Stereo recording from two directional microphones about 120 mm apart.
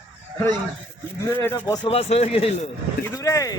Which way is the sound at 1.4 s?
20° left (ahead or behind).